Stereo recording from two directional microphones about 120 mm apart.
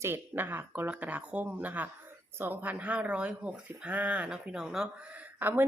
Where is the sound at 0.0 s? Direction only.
20° right (ahead or behind).